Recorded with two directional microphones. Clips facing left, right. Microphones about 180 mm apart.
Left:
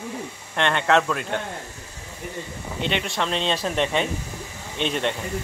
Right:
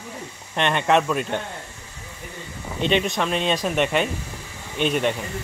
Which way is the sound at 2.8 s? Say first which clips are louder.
Right 4 dB; 20° right (ahead or behind).